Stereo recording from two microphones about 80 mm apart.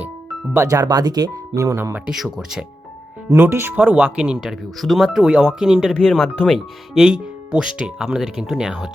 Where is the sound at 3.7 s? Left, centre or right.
Centre.